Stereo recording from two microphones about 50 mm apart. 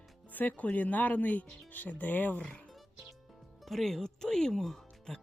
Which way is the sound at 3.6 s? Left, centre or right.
Centre.